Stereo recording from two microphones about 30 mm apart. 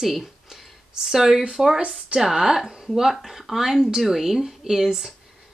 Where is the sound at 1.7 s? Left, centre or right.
Right.